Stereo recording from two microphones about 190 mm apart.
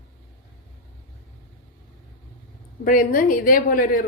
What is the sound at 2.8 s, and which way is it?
A woman's voice, 45° left (ahead or behind).